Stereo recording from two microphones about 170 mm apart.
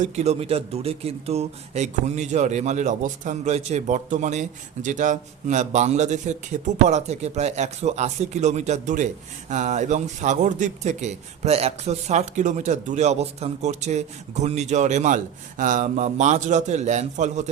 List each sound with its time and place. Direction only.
0.0 s speech: 40° right (ahead or behind)